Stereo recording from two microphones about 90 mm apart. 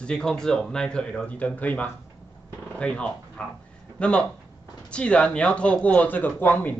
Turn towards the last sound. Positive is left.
turn(degrees=20)  # may be behind; listen again after turning